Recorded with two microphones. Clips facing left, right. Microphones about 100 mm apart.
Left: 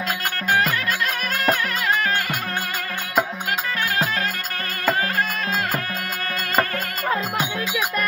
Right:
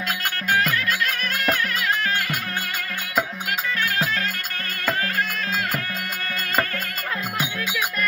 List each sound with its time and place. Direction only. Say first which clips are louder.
0.5 s music: left 1 dB; 20° left (ahead or behind)
7.1 s music: left 5 dB; 30° left (ahead or behind)